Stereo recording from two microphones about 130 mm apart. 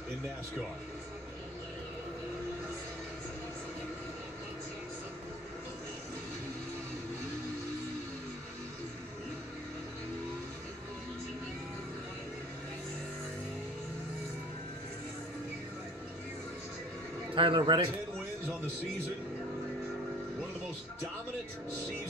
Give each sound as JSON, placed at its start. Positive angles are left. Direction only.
{"t": 17.4, "sound": "a man's voice", "side_deg": -40}